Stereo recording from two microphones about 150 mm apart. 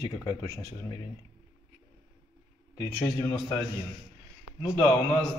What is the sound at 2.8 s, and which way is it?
Speech, 25° left (ahead or behind).